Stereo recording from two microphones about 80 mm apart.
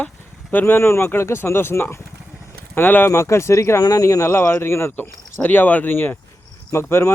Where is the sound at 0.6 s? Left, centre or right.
Left.